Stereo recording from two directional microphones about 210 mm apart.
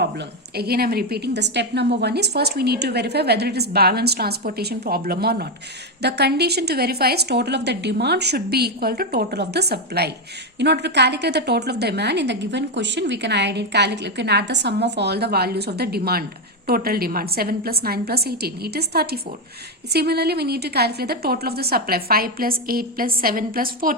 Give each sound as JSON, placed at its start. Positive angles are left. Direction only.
{"t": 0.0, "sound": "a woman's voice", "side_deg": -50}